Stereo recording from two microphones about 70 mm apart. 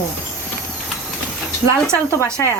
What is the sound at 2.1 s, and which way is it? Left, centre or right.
Speech, left.